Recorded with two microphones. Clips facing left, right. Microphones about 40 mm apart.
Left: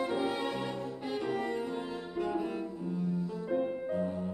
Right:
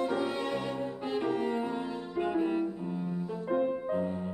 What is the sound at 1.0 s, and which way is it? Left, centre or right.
Music, right.